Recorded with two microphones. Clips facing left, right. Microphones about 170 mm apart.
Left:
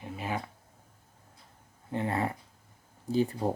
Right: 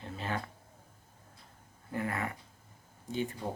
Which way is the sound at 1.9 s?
25° left (ahead or behind).